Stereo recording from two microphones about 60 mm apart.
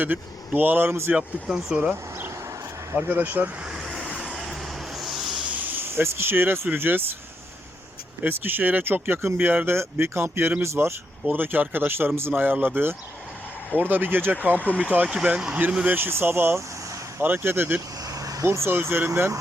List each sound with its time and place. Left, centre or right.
0.0 s speech: right
1.1 s speech: centre
2.9 s speech: right
3.7 s vehicle: centre
4.9 s a sound: centre
5.4 s speech: right
8.2 s speech: right
11.3 s speech: right
12.3 s speech: right
15.9 s speech: right
18.0 s vehicle: right
18.4 s speech: right